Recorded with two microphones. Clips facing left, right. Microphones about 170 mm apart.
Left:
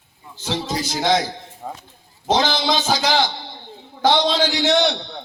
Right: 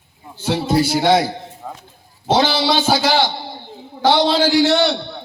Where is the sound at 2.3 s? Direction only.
5° right (ahead or behind).